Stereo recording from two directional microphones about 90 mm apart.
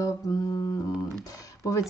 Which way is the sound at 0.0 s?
40° left (ahead or behind).